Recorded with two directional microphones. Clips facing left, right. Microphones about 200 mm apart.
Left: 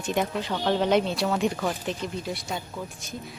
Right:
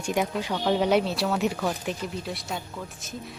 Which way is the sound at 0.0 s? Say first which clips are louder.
Even; 10° right (ahead or behind).